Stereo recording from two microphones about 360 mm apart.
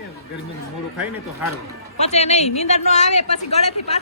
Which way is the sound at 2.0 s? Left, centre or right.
Centre.